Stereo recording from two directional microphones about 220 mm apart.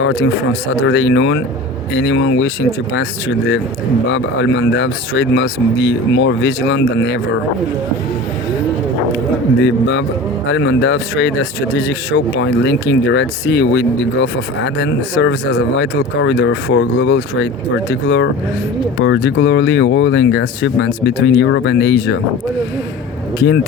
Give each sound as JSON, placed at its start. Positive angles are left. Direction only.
{"t": 0.0, "sound": "speech", "side_deg": 55}
{"t": 9.6, "sound": "speech", "side_deg": 55}